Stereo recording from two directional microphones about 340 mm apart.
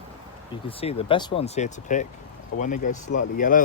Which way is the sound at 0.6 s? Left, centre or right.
Centre.